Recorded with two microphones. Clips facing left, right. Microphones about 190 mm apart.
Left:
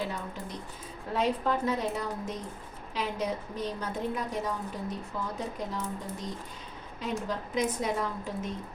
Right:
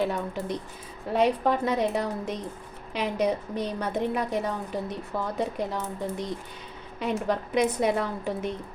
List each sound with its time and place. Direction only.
0.0 s a woman's voice: 70° right (ahead or behind)